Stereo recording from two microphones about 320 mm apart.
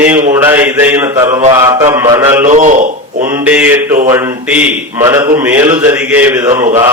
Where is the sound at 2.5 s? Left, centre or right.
Right.